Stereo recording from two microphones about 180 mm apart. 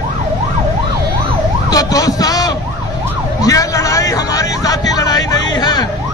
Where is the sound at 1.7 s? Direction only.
20° left (ahead or behind).